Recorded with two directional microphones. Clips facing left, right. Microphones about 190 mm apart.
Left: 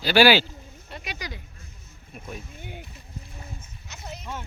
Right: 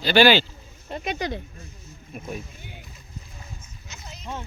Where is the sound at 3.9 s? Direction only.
55° left (ahead or behind).